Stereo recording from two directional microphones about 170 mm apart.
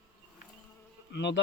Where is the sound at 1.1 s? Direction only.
90° left.